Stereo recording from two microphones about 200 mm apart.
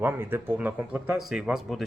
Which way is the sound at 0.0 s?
10° right (ahead or behind).